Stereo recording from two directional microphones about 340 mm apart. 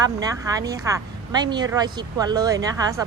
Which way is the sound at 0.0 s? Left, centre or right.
Centre.